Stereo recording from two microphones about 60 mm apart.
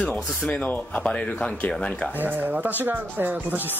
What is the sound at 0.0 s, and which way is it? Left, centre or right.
Speech, left.